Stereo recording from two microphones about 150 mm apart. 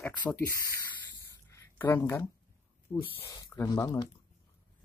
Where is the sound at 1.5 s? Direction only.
15° left (ahead or behind).